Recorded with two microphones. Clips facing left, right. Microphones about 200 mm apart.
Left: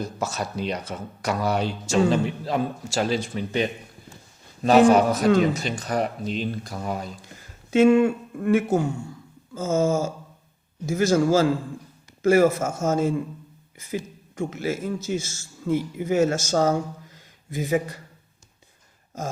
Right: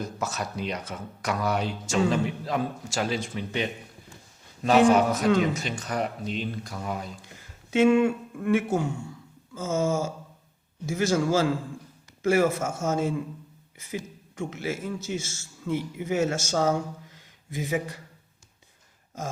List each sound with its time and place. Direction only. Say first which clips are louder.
0.0 s a man's voice: left 3 dB; 30° left (ahead or behind)